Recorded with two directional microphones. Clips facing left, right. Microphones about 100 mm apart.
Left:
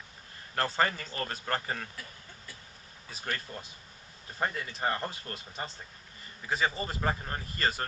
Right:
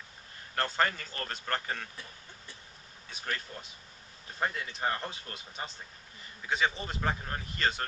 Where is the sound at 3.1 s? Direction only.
Centre (ahead or behind).